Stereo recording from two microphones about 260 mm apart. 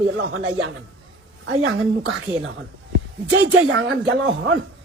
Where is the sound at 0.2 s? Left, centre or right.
Right.